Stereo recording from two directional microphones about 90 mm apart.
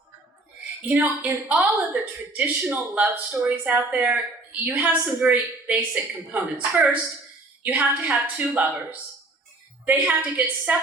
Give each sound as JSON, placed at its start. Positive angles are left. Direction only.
{"t": 0.9, "sound": "a woman's voice", "side_deg": -25}